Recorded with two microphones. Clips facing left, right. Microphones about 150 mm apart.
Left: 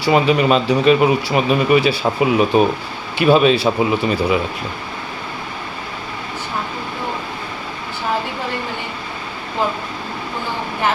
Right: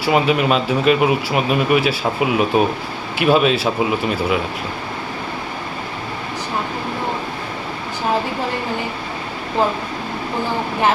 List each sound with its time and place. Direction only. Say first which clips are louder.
0.1 s speech: left 2 dB; centre (ahead or behind)